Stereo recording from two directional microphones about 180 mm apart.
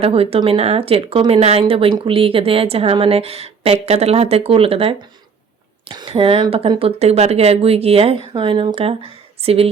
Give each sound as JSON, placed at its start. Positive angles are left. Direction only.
{"t": 0.0, "sound": "speech", "side_deg": -30}